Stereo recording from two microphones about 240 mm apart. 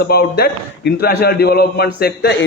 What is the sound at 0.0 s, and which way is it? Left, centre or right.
A man's voice, left.